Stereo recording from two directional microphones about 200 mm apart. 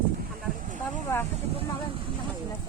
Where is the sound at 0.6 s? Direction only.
40° right (ahead or behind).